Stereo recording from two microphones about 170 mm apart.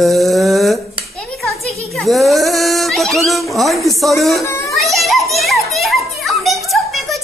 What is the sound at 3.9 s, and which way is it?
Children playing, centre (ahead or behind).